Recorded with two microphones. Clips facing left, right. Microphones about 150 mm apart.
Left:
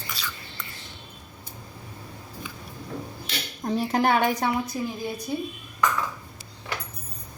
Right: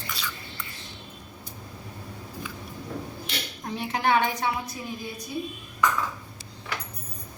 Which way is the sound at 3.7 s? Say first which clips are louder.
Left 2 dB; 45° left (ahead or behind).